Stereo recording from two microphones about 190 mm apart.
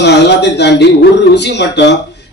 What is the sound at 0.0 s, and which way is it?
Speech, 65° left (ahead or behind).